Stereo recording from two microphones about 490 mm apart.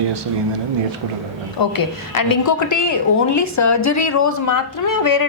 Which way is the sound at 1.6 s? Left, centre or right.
Left.